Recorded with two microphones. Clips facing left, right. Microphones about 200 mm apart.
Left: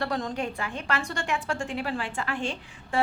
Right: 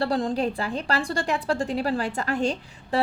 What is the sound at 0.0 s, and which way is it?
A woman's voice, 30° right (ahead or behind).